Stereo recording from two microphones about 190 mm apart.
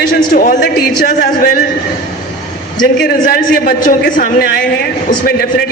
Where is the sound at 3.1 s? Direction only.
50° left (ahead or behind).